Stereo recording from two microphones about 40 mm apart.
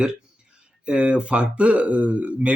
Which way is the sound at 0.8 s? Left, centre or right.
Right.